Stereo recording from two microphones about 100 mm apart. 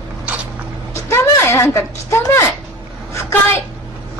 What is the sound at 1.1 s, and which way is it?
A woman's voice, 25° left (ahead or behind).